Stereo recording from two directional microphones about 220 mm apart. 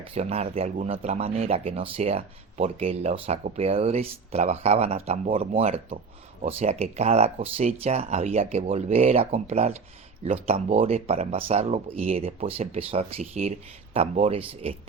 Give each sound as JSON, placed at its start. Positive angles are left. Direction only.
{"t": 0.1, "sound": "speech", "side_deg": -25}